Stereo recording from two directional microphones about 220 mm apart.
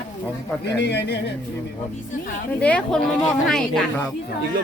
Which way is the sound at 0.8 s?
50° left (ahead or behind).